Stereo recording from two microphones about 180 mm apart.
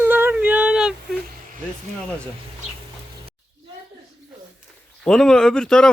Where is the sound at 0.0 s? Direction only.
10° right (ahead or behind).